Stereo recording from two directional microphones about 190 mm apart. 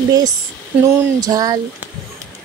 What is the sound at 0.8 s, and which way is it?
Speech, 20° right (ahead or behind).